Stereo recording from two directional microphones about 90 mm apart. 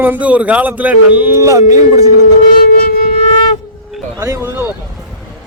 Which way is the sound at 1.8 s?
50° right (ahead or behind).